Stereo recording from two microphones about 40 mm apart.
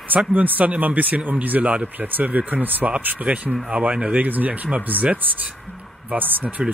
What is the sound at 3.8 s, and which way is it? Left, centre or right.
Speech, right.